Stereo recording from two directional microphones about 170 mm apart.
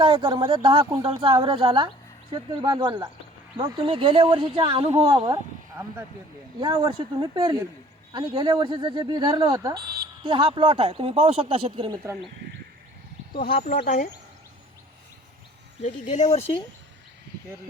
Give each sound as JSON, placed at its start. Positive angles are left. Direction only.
{"t": 0.0, "sound": "speech", "side_deg": -25}
{"t": 5.1, "sound": "speech", "side_deg": -20}
{"t": 6.6, "sound": "speech", "side_deg": -25}
{"t": 9.7, "sound": "a sound", "side_deg": -65}
{"t": 10.2, "sound": "speech", "side_deg": -30}
{"t": 13.8, "sound": "speech", "side_deg": 50}
{"t": 15.8, "sound": "speech", "side_deg": 45}